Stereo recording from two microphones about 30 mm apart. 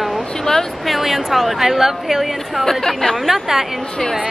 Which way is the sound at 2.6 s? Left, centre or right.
Centre.